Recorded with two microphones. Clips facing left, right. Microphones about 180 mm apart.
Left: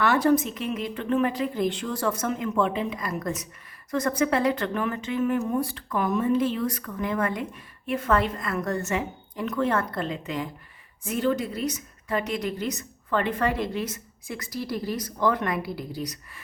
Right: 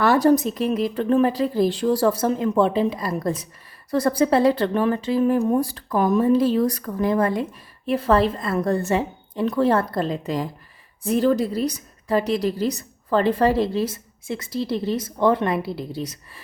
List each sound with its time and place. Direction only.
0.0 s a woman's voice: 35° right (ahead or behind)